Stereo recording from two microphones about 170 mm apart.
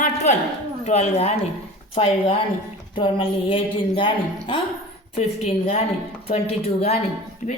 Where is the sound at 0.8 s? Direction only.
40° left (ahead or behind).